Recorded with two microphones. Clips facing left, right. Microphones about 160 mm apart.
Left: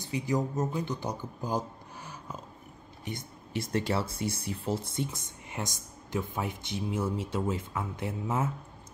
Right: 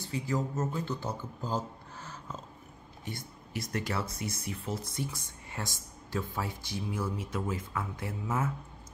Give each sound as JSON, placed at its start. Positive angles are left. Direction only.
{"t": 0.0, "sound": "a man's voice", "side_deg": 15}
{"t": 3.1, "sound": "speech", "side_deg": 25}